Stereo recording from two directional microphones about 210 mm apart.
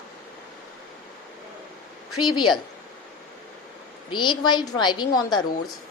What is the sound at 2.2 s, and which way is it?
Speech, 20° left (ahead or behind).